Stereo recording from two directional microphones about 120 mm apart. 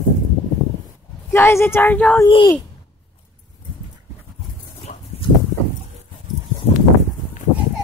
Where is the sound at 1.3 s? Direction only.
20° left (ahead or behind).